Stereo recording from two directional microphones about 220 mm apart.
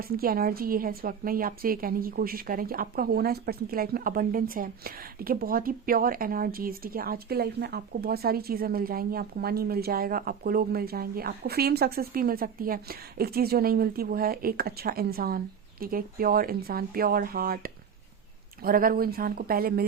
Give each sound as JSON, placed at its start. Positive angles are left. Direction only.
{"t": 0.0, "sound": "a woman's voice", "side_deg": -40}